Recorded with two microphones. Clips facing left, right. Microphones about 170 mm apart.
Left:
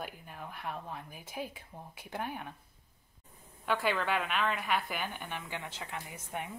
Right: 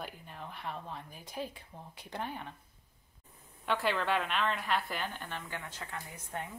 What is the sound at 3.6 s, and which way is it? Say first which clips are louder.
Speech: even; centre (ahead or behind).